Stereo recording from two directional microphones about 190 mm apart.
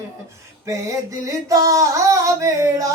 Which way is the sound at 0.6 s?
15° right (ahead or behind).